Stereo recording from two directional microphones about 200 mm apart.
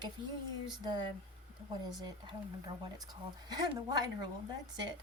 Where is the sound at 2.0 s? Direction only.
20° right (ahead or behind).